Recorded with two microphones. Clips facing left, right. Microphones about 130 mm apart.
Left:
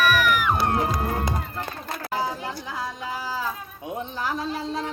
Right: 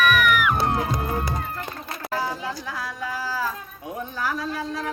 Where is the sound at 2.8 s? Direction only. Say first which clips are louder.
Even; 20° left (ahead or behind).